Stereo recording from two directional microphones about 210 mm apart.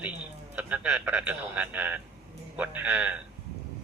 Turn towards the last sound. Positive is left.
turn(degrees=-5)  # may be behind; listen again after turning